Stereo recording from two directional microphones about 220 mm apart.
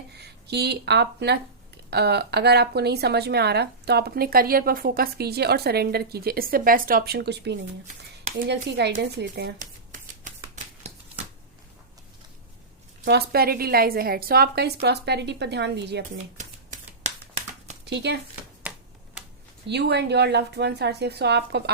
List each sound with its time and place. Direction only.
0.2 s speech: 50° right (ahead or behind)
8.4 s shuffling cards: 50° right (ahead or behind); by 10.9 s 35° right (ahead or behind)
13.1 s speech: 45° right (ahead or behind)
16.4 s shuffling cards: 35° right (ahead or behind)
17.8 s speech: 50° right (ahead or behind)
19.6 s speech: 50° right (ahead or behind)